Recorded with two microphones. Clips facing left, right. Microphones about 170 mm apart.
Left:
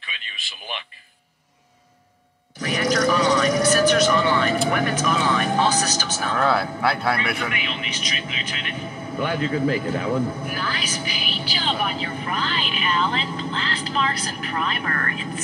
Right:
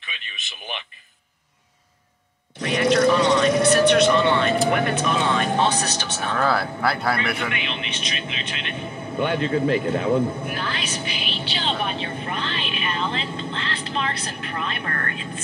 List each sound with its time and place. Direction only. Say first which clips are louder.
0.4 s speech: even; 20° right (ahead or behind)
2.5 s a sound: right 3 dB; 30° right (ahead or behind)
4.6 s speech: right 1 dB; 30° right (ahead or behind)
6.3 s speech: left 1 dB; centre (ahead or behind)
7.3 s speech: even; 25° right (ahead or behind)